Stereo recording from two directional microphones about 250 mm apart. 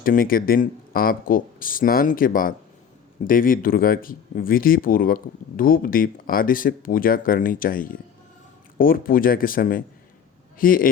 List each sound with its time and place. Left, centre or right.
0.0 s speech: left